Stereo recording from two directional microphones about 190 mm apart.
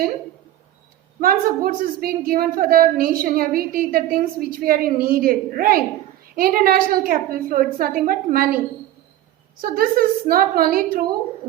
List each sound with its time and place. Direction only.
1.2 s a woman's voice: 50° right (ahead or behind)